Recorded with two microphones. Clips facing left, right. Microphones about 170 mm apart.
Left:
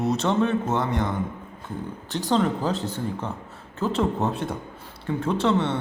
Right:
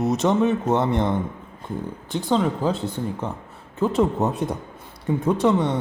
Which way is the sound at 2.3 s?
5° right (ahead or behind).